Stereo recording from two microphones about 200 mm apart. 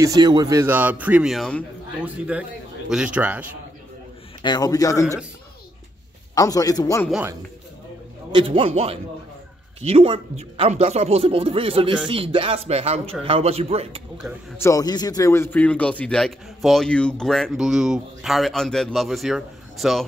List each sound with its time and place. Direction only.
0.0 s speech: 20° right (ahead or behind)
4.4 s a man's voice: 20° left (ahead or behind)
6.3 s a man's voice: 20° left (ahead or behind)
8.3 s a man's voice: 25° right (ahead or behind)
14.6 s a man's voice: 15° left (ahead or behind); by 20.1 s centre (ahead or behind)